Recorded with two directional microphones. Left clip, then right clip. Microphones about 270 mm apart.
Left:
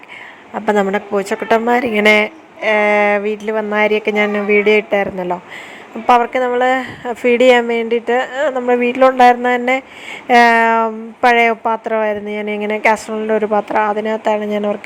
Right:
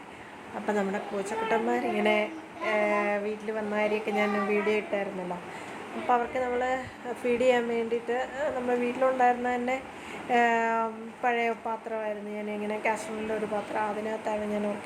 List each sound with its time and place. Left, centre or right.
0.7 s a woman's voice: left
6.1 s a woman's voice: left